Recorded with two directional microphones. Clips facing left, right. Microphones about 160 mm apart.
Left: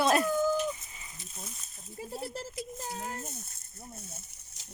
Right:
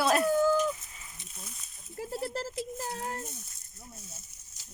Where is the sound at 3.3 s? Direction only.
55° left (ahead or behind).